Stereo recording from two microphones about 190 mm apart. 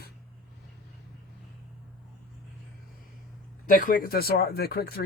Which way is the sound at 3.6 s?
45° left (ahead or behind).